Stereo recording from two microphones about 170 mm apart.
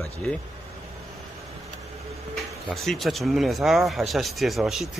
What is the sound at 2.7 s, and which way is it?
Speech, centre (ahead or behind).